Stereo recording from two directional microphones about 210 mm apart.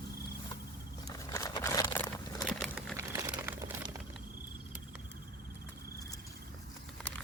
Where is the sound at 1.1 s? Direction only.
15° left (ahead or behind).